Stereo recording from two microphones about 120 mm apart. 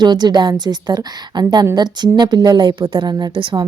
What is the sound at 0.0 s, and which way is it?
A woman's voice, 35° right (ahead or behind).